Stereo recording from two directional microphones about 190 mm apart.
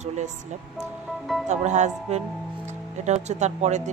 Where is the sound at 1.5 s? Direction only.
40° right (ahead or behind).